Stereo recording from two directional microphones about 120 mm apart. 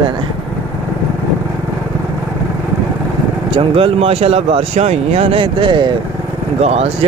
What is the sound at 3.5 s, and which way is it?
Speech, 50° right (ahead or behind).